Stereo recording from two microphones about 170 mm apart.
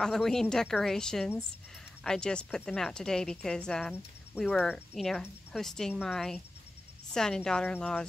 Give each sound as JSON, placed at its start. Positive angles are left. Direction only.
{"t": 0.0, "sound": "speech", "side_deg": 5}